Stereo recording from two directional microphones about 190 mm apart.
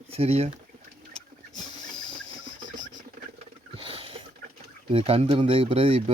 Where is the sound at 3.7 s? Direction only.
30° right (ahead or behind).